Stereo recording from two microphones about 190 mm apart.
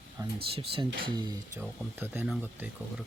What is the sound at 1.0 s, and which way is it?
Speech, 20° right (ahead or behind).